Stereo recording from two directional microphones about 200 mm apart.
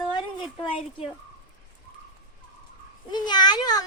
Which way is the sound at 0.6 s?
25° left (ahead or behind).